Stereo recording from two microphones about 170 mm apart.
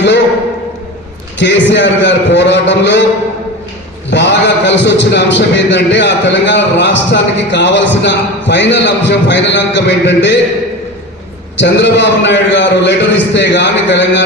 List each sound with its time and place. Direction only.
1.4 s a man's voice: 90° left
4.1 s a man's voice: 90° left
11.5 s a man's voice: 90° left